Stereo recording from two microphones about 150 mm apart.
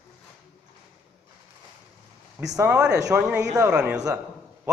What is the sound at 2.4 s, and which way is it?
Speech, 20° right (ahead or behind).